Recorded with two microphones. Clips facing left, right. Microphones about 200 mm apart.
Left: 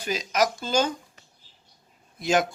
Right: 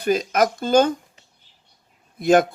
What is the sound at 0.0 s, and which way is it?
Speech, 55° right (ahead or behind).